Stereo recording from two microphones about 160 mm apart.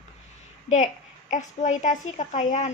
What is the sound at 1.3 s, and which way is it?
A woman's voice, 50° left (ahead or behind).